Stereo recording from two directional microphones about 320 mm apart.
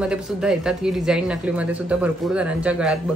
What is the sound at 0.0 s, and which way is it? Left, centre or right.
A woman's voice, centre.